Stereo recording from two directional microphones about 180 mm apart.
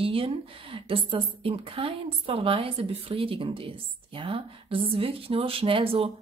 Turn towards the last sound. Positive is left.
turn(degrees=-30)  # may be behind; listen again after turning